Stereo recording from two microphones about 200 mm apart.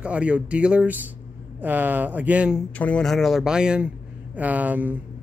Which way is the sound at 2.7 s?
5° left (ahead or behind).